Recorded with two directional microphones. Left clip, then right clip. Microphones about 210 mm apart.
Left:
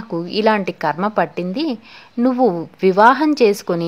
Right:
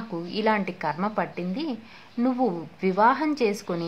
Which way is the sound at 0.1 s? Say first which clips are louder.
Left 8 dB; 40° left (ahead or behind).